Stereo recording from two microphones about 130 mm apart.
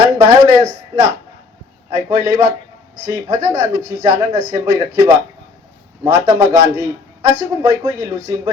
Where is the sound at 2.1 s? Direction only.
20° right (ahead or behind).